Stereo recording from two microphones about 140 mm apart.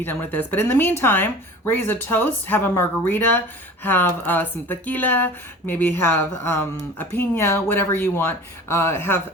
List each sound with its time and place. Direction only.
0.0 s speech: 15° left (ahead or behind)